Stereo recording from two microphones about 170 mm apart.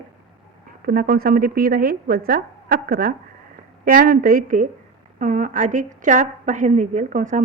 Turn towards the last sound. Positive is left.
turn(degrees=-50)  # may be behind; listen again after turning